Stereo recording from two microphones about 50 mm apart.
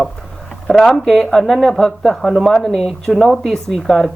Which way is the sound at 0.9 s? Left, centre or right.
Centre.